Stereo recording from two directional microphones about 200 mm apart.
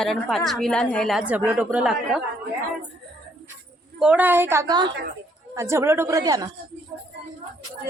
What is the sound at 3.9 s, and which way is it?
Speech, 5° right (ahead or behind).